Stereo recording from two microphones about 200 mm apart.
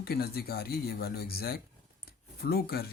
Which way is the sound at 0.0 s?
50° left (ahead or behind).